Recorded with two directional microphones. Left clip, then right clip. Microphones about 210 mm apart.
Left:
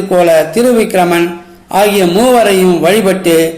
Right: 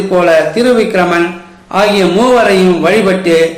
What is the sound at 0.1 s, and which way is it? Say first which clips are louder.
A man's voice: left 1 dB; 40° left (ahead or behind).